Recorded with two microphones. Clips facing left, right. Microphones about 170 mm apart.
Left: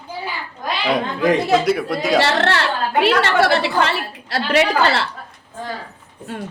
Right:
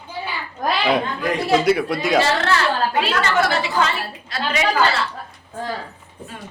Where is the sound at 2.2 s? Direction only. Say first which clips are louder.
Left 1 dB; 70° left (ahead or behind).